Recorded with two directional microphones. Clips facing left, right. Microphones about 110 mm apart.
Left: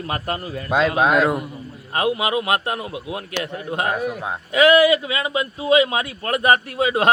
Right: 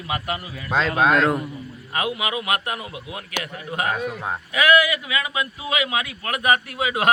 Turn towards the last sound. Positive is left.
turn(degrees=30)  # may be behind; listen again after turning